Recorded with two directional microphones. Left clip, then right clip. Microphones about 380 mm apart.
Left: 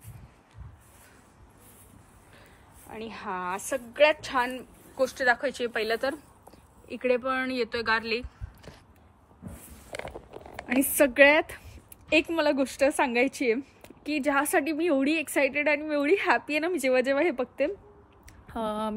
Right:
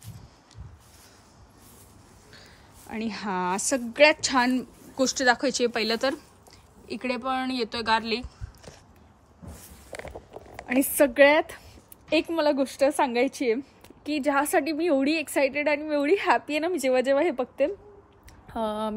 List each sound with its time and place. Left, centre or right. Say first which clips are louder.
3.1 s speech: right 4 dB; centre
10.7 s speech: right 1 dB; centre